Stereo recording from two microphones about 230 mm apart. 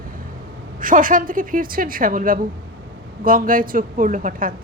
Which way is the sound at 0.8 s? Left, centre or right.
Right.